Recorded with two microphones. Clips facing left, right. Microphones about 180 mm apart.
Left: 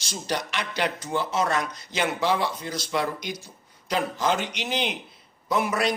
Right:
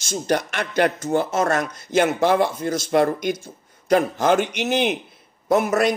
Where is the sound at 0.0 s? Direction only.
50° right (ahead or behind).